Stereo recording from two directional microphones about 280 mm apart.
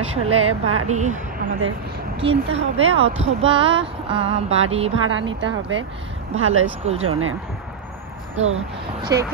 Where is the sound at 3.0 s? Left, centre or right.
Centre.